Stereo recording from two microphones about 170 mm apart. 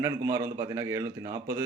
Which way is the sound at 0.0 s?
20° right (ahead or behind).